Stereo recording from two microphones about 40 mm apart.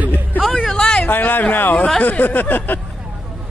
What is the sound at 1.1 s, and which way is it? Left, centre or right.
Speech, left.